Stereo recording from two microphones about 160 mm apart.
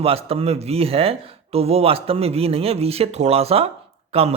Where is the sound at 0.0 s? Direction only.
40° right (ahead or behind).